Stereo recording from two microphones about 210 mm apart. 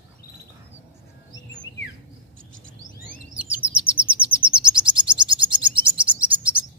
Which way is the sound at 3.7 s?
5° right (ahead or behind).